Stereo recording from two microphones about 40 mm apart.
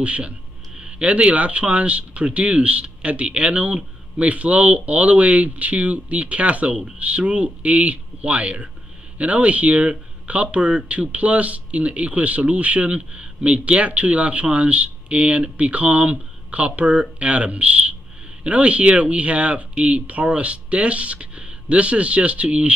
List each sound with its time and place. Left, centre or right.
0.0 s speech: right